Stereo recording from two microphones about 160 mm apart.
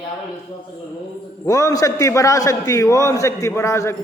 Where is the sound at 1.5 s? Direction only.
20° left (ahead or behind).